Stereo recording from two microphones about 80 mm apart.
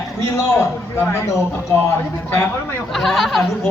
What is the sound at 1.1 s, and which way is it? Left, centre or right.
Speech, left.